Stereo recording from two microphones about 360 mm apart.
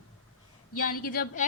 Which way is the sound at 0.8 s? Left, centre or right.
Left.